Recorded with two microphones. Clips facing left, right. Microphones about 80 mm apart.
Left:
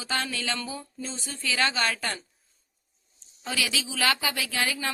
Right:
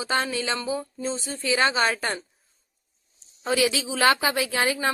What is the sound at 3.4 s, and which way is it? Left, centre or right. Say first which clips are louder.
Speech: right 7 dB; right.